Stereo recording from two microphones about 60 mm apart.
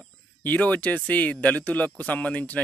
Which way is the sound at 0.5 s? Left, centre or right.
Left.